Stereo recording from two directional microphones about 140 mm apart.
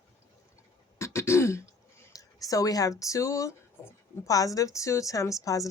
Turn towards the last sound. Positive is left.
turn(degrees=25)  # may be behind; listen again after turning